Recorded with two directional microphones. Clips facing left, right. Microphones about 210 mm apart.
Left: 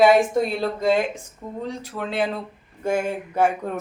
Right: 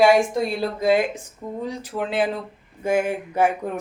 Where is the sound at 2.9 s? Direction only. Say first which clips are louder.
Right 2 dB; 10° right (ahead or behind).